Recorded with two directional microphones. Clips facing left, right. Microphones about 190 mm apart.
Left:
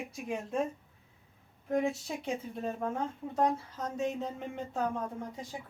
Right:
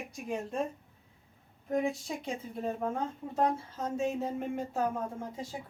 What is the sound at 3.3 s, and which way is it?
Speech, 30° right (ahead or behind).